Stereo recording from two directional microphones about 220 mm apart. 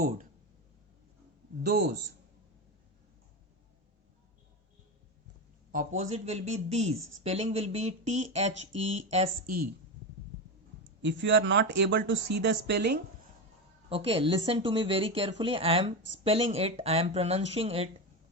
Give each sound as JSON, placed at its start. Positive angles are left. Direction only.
{"t": 1.6, "sound": "speech", "side_deg": -45}
{"t": 5.7, "sound": "speech", "side_deg": -35}
{"t": 11.0, "sound": "speech", "side_deg": -55}
{"t": 13.9, "sound": "speech", "side_deg": -25}